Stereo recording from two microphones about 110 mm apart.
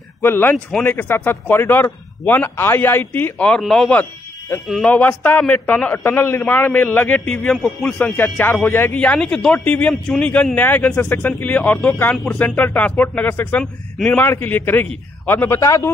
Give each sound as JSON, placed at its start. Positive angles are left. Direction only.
{"t": 0.2, "sound": "a man's voice", "side_deg": 20}
{"t": 3.9, "sound": "a sound", "side_deg": 15}
{"t": 4.8, "sound": "a man's voice", "side_deg": 15}